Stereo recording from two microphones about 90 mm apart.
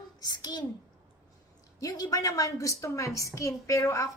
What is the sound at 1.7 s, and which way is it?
A woman's voice, 45° left (ahead or behind).